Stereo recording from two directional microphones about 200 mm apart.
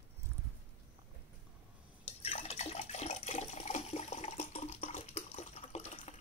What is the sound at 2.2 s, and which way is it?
Toilet flush, 30° left (ahead or behind).